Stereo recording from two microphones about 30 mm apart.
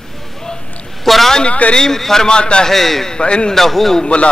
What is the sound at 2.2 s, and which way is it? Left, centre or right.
Speech, left.